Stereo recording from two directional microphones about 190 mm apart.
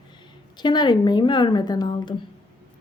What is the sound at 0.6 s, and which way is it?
A woman's voice, 25° left (ahead or behind).